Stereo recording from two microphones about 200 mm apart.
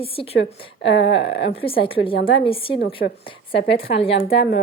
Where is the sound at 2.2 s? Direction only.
55° left (ahead or behind).